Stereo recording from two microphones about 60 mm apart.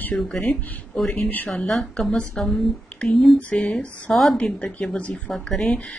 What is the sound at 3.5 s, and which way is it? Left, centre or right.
Speech, centre.